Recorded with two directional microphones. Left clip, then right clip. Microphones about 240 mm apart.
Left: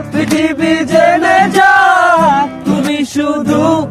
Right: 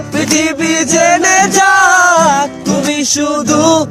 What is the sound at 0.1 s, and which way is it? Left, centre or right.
Music, right.